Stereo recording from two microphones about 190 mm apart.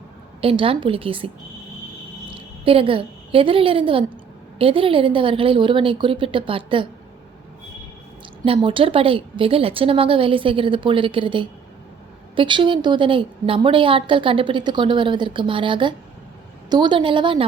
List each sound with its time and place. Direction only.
0.4 s a woman's voice: 30° right (ahead or behind)
2.3 s a woman's voice: 30° right (ahead or behind)
8.4 s a woman's voice: 30° right (ahead or behind)